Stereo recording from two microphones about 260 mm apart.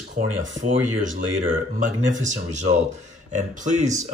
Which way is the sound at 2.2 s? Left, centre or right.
Right.